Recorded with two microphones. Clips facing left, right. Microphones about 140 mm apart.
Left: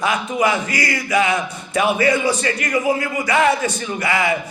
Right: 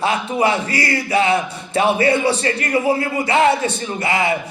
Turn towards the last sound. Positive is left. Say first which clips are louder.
# right 1 dB
turn(degrees=-25)  # may be behind; listen again after turning